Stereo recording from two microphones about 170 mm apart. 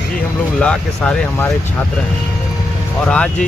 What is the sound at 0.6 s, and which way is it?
Speech, 5° left (ahead or behind).